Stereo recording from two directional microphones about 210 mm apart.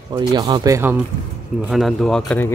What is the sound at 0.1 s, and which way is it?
Speech, 15° right (ahead or behind).